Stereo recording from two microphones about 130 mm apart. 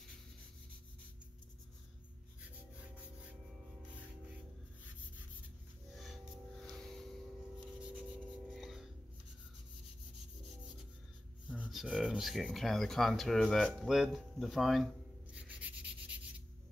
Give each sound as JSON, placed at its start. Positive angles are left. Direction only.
{"t": 6.6, "sound": "music", "side_deg": 5}
{"t": 8.5, "sound": "music", "side_deg": 0}
{"t": 11.4, "sound": "speech", "side_deg": -10}
{"t": 15.3, "sound": "rub", "side_deg": -10}